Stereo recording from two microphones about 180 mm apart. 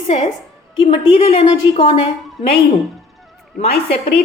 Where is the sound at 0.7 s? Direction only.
30° left (ahead or behind).